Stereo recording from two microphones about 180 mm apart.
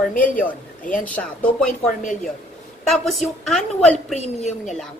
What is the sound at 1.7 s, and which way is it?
Speech, 45° left (ahead or behind).